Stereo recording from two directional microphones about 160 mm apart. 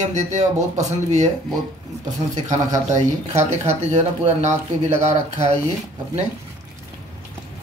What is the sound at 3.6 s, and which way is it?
Speech, 45° right (ahead or behind).